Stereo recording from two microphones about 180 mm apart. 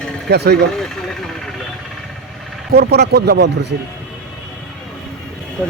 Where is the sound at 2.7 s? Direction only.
60° right (ahead or behind).